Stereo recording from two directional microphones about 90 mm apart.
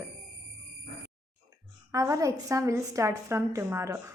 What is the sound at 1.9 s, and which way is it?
A woman's voice, 35° right (ahead or behind).